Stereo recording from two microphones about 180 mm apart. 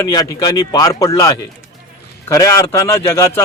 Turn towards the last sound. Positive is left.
turn(degrees=15)  # may be behind; listen again after turning